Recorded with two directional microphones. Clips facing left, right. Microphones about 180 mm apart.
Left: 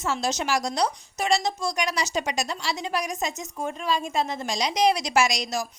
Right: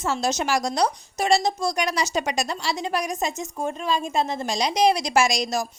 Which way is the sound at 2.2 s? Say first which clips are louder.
Right 2 dB; 50° right (ahead or behind).